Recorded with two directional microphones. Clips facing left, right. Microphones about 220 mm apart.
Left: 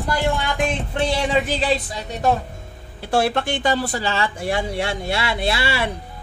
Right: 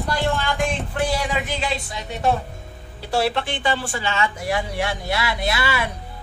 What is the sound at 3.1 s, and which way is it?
A man's voice, 50° left (ahead or behind).